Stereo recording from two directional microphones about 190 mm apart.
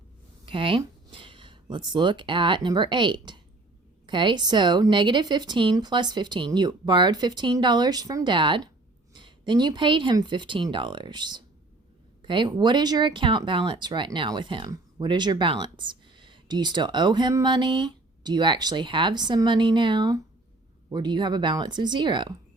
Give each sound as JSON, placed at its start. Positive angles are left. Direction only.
{"t": 0.4, "sound": "speech", "side_deg": -25}